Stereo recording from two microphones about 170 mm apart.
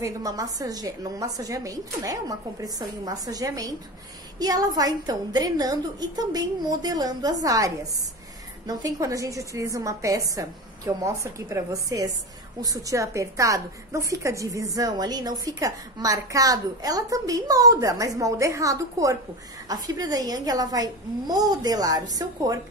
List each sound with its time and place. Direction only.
0.0 s a woman's voice: 20° right (ahead or behind)